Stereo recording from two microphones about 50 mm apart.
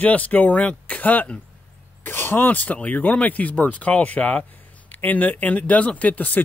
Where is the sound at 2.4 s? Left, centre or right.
Left.